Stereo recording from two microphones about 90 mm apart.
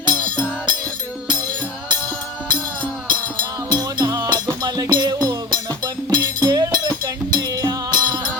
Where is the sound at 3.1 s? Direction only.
50° right (ahead or behind).